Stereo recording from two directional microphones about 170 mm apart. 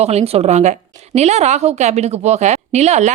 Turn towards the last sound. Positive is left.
turn(degrees=-40)  # may be behind; listen again after turning